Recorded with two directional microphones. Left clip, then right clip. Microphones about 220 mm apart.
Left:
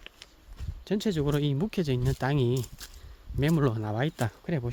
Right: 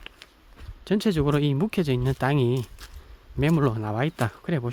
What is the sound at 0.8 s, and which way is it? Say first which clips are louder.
Speech: right 5 dB; 30° right (ahead or behind).